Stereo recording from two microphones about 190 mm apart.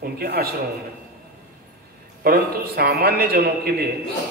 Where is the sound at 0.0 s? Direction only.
55° right (ahead or behind).